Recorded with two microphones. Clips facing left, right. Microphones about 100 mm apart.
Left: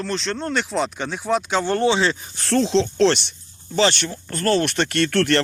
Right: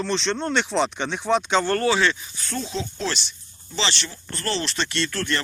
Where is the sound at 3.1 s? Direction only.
60° left (ahead or behind).